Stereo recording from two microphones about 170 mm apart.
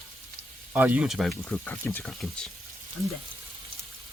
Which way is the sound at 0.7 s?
10° right (ahead or behind).